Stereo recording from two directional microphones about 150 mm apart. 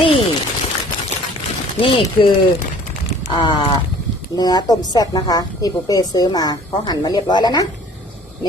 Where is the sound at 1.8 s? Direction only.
40° left (ahead or behind).